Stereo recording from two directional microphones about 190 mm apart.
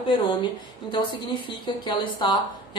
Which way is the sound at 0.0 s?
25° left (ahead or behind).